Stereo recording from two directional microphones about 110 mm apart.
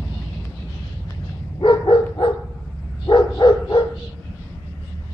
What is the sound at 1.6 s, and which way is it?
Dog, 45° left (ahead or behind).